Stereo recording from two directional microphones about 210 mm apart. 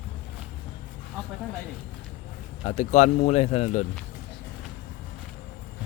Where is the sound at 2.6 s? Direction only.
35° left (ahead or behind).